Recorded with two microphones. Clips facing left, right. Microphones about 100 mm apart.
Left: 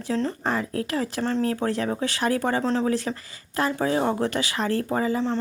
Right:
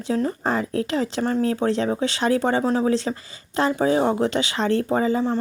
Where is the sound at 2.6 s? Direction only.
10° right (ahead or behind).